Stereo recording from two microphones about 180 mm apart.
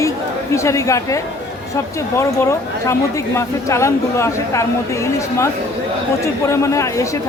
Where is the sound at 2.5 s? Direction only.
15° left (ahead or behind).